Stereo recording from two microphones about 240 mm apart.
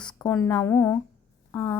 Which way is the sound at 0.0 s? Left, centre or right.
Centre.